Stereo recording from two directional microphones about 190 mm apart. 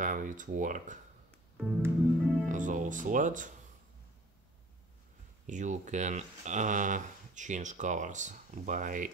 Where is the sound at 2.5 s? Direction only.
40° right (ahead or behind).